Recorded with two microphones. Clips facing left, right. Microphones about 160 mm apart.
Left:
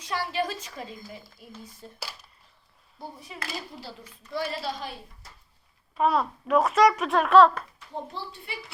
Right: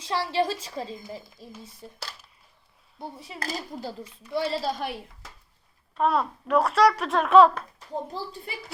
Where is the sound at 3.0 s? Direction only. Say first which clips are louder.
Right 3 dB; 30° right (ahead or behind).